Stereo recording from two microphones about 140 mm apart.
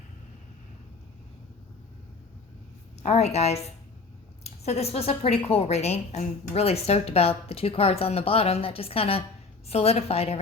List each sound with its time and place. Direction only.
3.0 s a woman's voice: 50° left (ahead or behind)